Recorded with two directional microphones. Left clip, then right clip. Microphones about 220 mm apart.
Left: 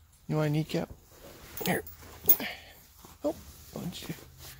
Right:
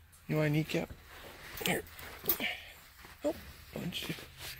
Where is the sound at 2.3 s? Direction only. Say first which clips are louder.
Right 2 dB; 25° left (ahead or behind).